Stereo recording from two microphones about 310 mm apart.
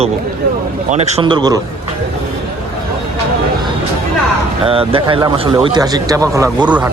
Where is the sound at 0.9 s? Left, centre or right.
Right.